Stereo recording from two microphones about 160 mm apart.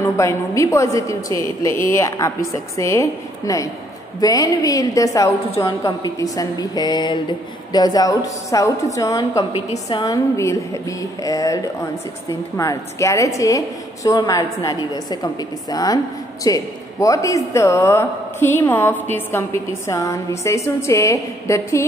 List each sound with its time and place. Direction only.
0.0 s a woman's voice: 20° left (ahead or behind)